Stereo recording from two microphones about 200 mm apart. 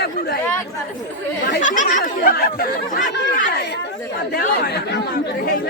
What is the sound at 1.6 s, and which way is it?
Speech, 40° left (ahead or behind).